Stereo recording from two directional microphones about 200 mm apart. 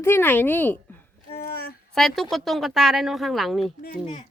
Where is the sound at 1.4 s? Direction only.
50° left (ahead or behind).